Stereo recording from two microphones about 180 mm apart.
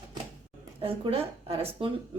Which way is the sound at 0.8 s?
30° right (ahead or behind).